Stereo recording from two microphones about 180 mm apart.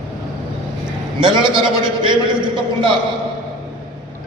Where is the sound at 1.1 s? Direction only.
25° right (ahead or behind).